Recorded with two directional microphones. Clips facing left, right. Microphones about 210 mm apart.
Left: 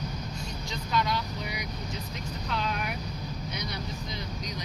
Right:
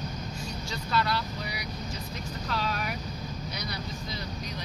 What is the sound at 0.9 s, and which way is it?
Vehicle, 15° left (ahead or behind).